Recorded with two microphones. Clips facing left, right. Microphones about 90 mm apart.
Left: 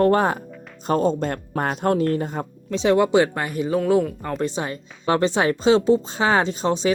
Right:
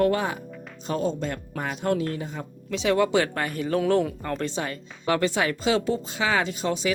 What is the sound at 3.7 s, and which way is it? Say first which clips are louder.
Speech: left 3 dB; 5° left (ahead or behind).